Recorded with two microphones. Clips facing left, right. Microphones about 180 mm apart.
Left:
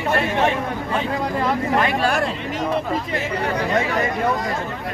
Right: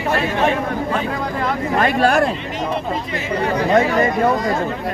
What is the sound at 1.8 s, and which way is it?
Speech, 50° right (ahead or behind).